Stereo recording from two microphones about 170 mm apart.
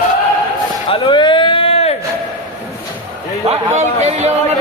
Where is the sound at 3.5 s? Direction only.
40° right (ahead or behind).